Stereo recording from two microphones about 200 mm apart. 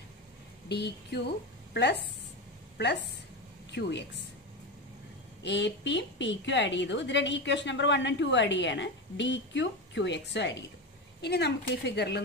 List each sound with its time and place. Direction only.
0.7 s a woman's voice: 55° left (ahead or behind)
3.7 s a woman's voice: 60° left (ahead or behind)
5.4 s a woman's voice: 60° left (ahead or behind)